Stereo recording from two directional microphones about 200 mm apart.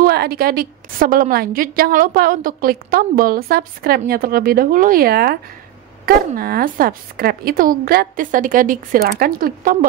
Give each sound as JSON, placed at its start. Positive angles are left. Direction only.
{"t": 0.0, "sound": "a woman's voice", "side_deg": -50}